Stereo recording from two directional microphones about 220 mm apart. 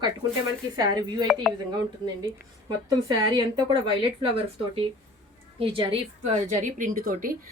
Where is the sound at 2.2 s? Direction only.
20° right (ahead or behind).